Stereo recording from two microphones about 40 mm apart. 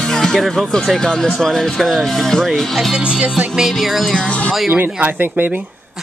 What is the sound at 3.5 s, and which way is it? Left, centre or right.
Speech, centre.